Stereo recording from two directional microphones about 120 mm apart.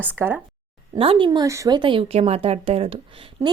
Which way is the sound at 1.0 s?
45° right (ahead or behind).